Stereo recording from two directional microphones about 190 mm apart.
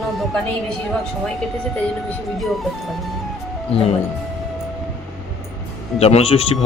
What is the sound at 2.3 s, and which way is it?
Speech, centre (ahead or behind).